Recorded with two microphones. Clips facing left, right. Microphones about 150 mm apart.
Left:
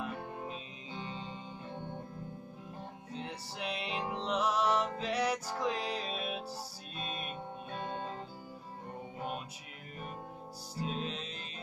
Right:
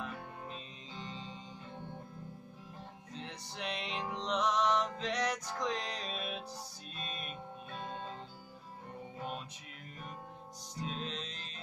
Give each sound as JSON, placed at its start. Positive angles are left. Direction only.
{"t": 3.1, "sound": "music", "side_deg": 5}
{"t": 10.8, "sound": "music", "side_deg": 5}